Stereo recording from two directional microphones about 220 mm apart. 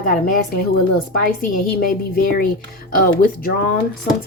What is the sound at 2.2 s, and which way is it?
Speech, 40° left (ahead or behind).